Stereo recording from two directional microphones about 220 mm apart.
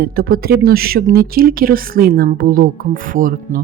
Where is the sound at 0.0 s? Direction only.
45° right (ahead or behind).